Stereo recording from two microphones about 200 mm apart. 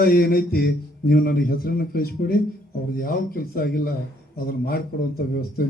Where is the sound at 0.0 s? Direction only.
50° left (ahead or behind).